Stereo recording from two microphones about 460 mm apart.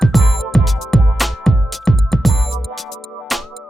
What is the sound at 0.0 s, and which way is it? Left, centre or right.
Music, centre.